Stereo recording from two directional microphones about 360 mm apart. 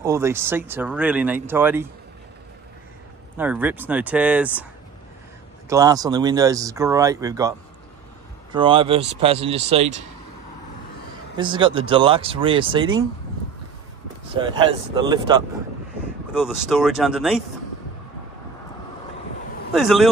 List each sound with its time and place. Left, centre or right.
0.0 s speech: centre
3.3 s speech: centre
5.7 s speech: centre
8.5 s speech: centre
11.3 s speech: centre
14.4 s speech: centre
16.3 s speech: centre
19.7 s speech: centre